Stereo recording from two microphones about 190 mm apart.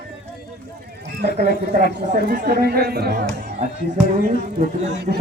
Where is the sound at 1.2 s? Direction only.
60° right (ahead or behind).